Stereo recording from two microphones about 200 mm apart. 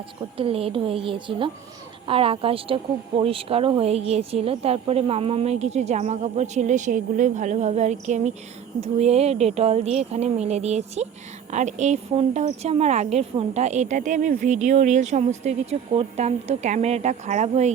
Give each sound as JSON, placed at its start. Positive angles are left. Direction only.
{"t": 0.2, "sound": "a woman's voice", "side_deg": -25}